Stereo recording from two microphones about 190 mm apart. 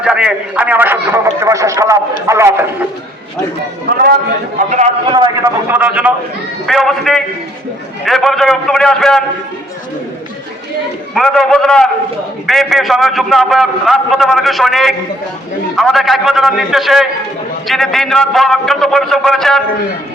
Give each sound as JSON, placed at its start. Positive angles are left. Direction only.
{"t": 0.0, "sound": "a man's voice", "side_deg": -5}
{"t": 4.5, "sound": "a man's voice", "side_deg": -40}
{"t": 5.0, "sound": "a man's voice", "side_deg": -20}
{"t": 5.6, "sound": "a man's voice", "side_deg": -10}
{"t": 11.1, "sound": "a man's voice", "side_deg": 0}